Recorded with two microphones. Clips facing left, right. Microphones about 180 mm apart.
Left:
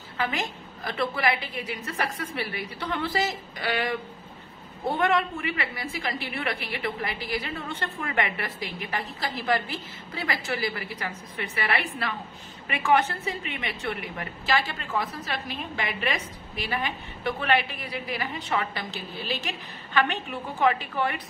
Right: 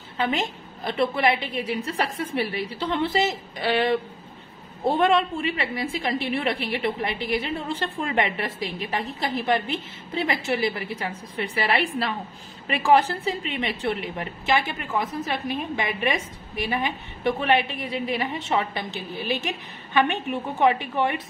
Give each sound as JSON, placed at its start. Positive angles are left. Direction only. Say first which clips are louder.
{"t": 0.2, "sound": "a woman's voice", "louder": "right 4 dB", "side_deg": -25}